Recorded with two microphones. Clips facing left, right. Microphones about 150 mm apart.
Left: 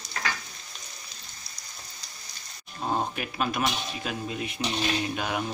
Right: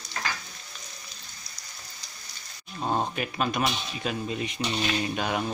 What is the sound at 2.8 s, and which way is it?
Speech, centre (ahead or behind).